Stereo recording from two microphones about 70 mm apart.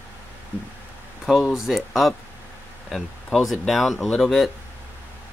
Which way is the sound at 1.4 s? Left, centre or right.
Centre.